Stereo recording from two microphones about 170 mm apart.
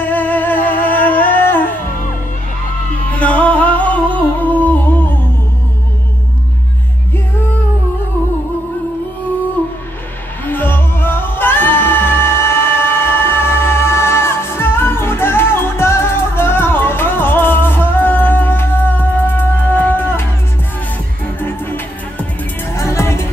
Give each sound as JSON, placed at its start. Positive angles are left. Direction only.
{"t": 0.0, "sound": "music", "side_deg": 10}
{"t": 0.6, "sound": "music", "side_deg": 55}
{"t": 3.1, "sound": "music", "side_deg": 10}
{"t": 10.4, "sound": "music", "side_deg": 10}
{"t": 21.4, "sound": "music", "side_deg": 10}